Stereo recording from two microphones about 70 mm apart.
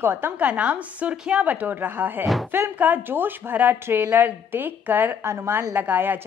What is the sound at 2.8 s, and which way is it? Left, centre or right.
A woman's voice, right.